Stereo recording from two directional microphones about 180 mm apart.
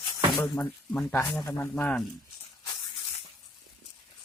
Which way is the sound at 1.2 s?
20° left (ahead or behind).